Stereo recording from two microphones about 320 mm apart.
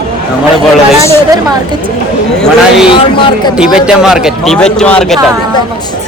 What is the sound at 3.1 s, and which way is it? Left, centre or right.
Speech, centre.